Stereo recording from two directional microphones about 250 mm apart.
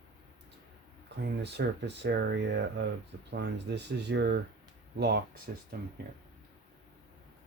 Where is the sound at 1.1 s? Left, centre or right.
Right.